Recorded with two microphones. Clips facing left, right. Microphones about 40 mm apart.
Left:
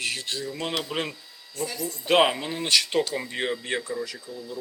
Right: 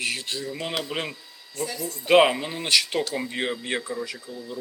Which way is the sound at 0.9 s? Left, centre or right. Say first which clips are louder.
Left 1 dB; centre.